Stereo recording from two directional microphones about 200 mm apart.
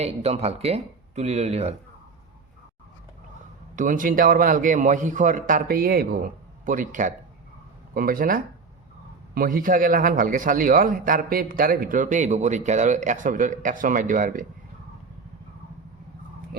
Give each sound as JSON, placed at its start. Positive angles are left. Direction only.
{"t": 0.0, "sound": "a man's voice", "side_deg": -30}
{"t": 3.8, "sound": "a man's voice", "side_deg": -40}